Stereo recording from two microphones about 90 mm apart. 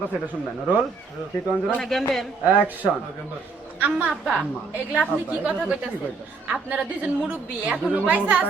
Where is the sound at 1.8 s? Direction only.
5° left (ahead or behind).